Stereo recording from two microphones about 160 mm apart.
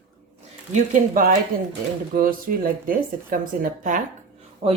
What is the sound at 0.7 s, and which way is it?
Speech, 55° right (ahead or behind).